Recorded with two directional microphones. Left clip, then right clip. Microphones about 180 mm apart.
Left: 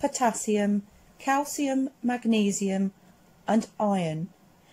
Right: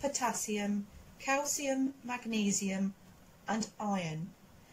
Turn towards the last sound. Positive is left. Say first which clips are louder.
# left 10 dB
turn(degrees=45)  # may be behind; listen again after turning